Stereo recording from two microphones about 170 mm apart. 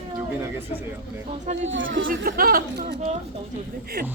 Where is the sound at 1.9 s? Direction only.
60° right (ahead or behind).